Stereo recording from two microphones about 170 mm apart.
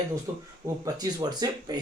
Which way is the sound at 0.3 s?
15° right (ahead or behind).